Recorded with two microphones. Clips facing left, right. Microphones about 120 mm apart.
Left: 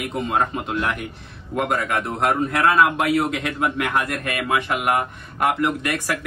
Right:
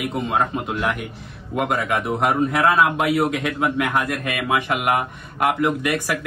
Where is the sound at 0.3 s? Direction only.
Centre (ahead or behind).